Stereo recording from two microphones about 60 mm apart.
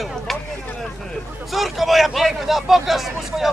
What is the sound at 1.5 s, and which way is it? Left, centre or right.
Speech, centre.